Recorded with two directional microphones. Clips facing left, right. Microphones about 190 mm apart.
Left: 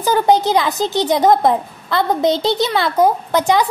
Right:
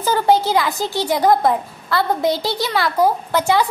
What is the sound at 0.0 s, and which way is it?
Speech, 15° left (ahead or behind).